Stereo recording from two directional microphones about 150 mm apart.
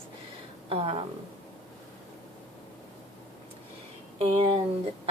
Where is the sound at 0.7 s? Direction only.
40° right (ahead or behind).